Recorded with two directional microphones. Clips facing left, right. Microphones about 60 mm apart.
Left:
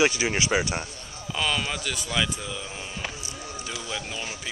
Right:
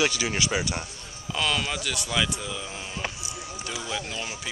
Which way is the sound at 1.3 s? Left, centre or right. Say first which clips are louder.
Even; centre.